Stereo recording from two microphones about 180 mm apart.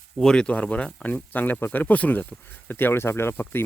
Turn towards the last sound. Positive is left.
turn(degrees=10)  # may be behind; listen again after turning